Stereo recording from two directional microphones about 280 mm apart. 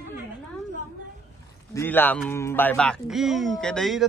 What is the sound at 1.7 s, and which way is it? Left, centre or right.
Speech, centre.